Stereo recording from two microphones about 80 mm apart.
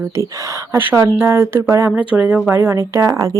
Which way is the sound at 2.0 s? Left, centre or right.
Centre.